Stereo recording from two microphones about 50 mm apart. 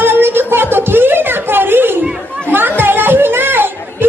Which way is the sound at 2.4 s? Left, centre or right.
Right.